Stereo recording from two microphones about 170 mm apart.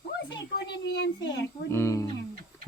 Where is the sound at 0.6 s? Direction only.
90° left.